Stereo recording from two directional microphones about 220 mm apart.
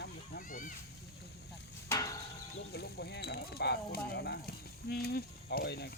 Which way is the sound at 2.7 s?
50° left (ahead or behind).